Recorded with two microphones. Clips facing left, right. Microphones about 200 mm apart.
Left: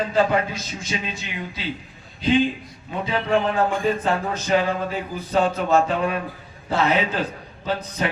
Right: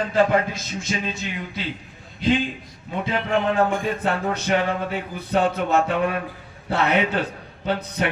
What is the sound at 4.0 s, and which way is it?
A man's voice, 65° right (ahead or behind).